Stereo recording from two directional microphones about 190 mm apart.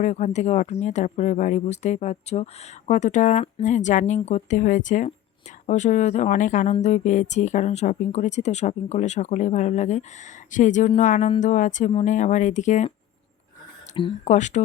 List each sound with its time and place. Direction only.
0.0 s speech: 40° left (ahead or behind)
13.9 s speech: 25° left (ahead or behind)
14.3 s speech: 40° left (ahead or behind)